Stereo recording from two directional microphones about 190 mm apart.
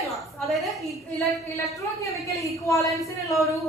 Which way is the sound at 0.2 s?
Centre (ahead or behind).